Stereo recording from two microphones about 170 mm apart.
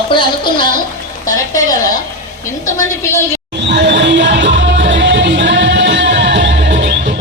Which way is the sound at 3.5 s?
90° right.